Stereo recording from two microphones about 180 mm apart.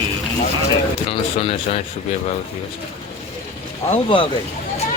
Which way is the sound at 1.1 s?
30° left (ahead or behind).